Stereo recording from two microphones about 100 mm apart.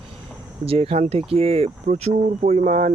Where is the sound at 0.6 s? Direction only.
80° right.